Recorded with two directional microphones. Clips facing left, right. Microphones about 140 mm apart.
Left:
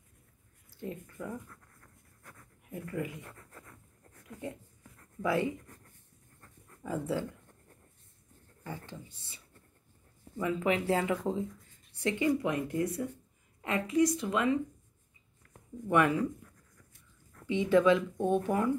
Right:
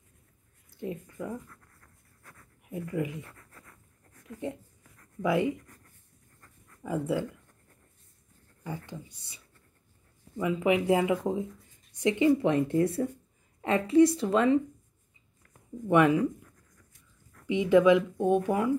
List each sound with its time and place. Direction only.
0.7 s speech: 20° right (ahead or behind)
1.5 s a sound: 5° left (ahead or behind)
2.7 s a woman's voice: 20° right (ahead or behind)
3.3 s a sound: 10° left (ahead or behind)
4.4 s a woman's voice: 20° right (ahead or behind)
6.8 s speech: 15° right (ahead or behind)
8.6 s a woman's voice: 10° right (ahead or behind); by 14.6 s 30° right (ahead or behind)
15.9 s speech: 15° right (ahead or behind)
17.5 s speech: 15° right (ahead or behind)